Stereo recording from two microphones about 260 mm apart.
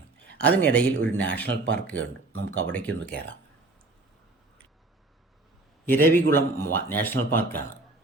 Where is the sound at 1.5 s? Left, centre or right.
Right.